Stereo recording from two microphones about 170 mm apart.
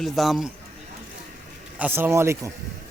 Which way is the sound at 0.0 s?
Centre (ahead or behind).